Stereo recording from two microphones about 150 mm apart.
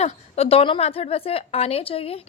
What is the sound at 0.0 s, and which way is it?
A woman's voice, 40° left (ahead or behind).